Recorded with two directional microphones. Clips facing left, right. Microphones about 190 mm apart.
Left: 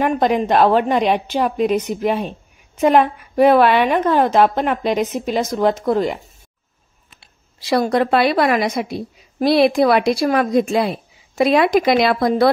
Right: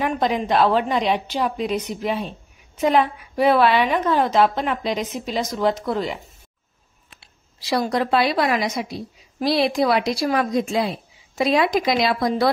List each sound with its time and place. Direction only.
0.0 s a woman's voice: 50° left (ahead or behind)
7.6 s a woman's voice: 55° left (ahead or behind)